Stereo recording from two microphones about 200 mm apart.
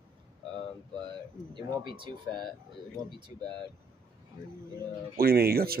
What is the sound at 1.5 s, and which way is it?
Speech, 25° right (ahead or behind).